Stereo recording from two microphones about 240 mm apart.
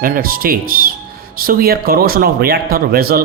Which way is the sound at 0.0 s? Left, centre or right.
Right.